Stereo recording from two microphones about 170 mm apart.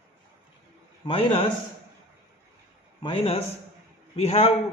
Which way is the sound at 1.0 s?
30° left (ahead or behind).